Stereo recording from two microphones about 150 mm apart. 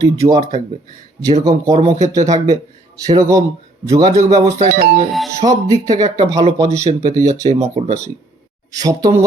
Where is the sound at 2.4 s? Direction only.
25° right (ahead or behind).